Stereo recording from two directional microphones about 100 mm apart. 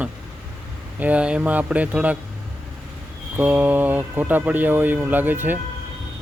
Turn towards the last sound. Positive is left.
turn(degrees=-20)  # may be behind; listen again after turning